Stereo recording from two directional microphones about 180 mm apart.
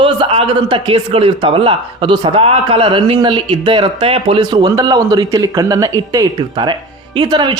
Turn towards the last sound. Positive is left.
turn(degrees=-25)  # may be behind; listen again after turning